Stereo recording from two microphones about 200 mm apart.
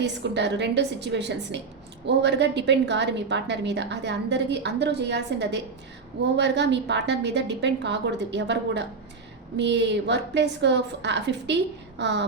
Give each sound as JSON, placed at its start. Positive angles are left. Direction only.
{"t": 0.0, "sound": "a woman's voice", "side_deg": -60}